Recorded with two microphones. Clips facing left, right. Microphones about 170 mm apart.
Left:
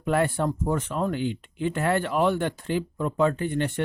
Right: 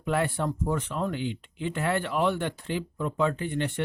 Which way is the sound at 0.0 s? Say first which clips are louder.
Left 3 dB; 45° left (ahead or behind).